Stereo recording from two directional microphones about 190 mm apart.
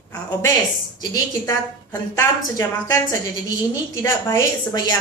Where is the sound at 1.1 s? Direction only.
20° left (ahead or behind).